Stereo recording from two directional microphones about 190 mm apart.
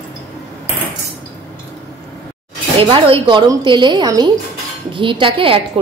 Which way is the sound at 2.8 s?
30° right (ahead or behind).